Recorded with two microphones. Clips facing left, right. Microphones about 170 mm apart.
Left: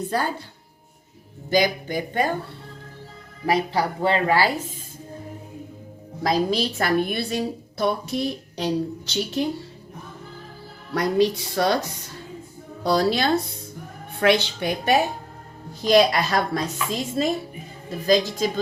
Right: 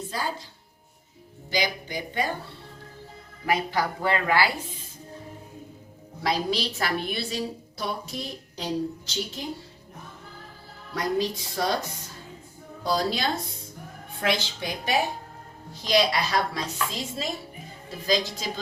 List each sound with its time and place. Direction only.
0.1 s a woman's voice: 60° left (ahead or behind)
1.5 s speech: 50° left (ahead or behind)
3.4 s a woman's voice: 35° left (ahead or behind)
6.2 s a woman's voice: 45° left (ahead or behind); by 9.5 s 70° left (ahead or behind)
10.9 s a woman's voice: 70° left (ahead or behind)
12.8 s a woman's voice: 70° left (ahead or behind); by 18.6 s 50° left (ahead or behind)